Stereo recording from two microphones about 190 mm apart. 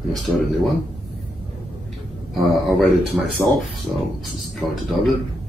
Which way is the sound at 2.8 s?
Centre (ahead or behind).